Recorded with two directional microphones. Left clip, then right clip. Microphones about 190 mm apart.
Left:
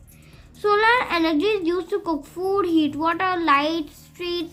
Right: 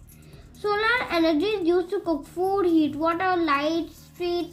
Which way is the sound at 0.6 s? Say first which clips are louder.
Left 5 dB; 35° left (ahead or behind).